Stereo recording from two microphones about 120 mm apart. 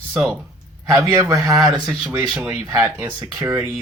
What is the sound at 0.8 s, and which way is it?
Speech, 25° right (ahead or behind).